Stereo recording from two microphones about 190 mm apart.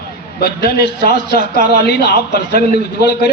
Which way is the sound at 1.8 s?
60° left (ahead or behind).